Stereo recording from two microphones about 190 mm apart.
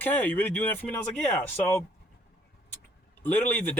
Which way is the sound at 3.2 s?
10° left (ahead or behind).